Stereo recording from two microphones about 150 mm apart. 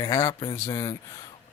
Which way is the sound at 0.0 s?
20° left (ahead or behind).